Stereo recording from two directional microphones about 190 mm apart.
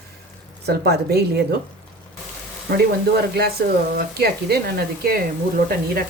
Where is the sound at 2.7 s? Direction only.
55° right (ahead or behind).